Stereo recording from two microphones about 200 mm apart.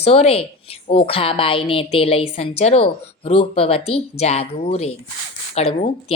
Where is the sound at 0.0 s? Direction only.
30° left (ahead or behind).